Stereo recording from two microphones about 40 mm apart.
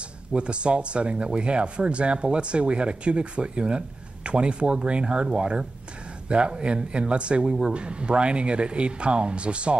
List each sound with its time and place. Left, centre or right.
0.3 s speech: right